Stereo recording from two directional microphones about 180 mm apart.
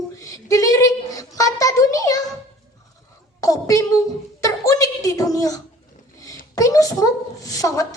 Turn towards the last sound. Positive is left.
turn(degrees=20)  # may be behind; listen again after turning